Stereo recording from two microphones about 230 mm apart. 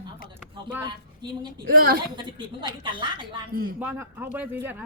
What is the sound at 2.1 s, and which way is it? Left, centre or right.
Speech, right.